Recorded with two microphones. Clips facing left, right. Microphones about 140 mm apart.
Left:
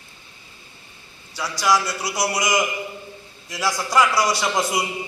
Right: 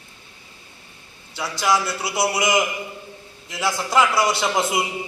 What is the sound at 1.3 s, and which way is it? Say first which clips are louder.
Speech: even; 25° right (ahead or behind).